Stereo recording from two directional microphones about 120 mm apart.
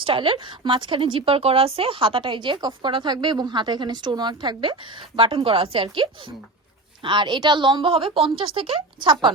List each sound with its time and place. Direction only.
0.0 s a woman's voice: 45° right (ahead or behind)